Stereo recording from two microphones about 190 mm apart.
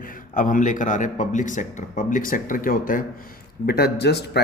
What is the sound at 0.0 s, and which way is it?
A man's voice, 45° left (ahead or behind).